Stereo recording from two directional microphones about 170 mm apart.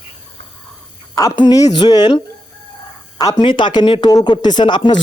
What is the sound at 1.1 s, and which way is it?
Speech, 20° left (ahead or behind).